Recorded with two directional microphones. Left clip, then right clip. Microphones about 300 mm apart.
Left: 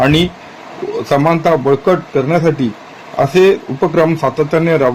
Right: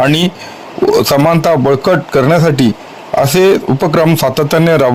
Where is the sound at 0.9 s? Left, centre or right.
Right.